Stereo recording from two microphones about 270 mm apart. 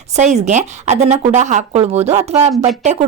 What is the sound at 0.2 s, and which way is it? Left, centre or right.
Speech, right.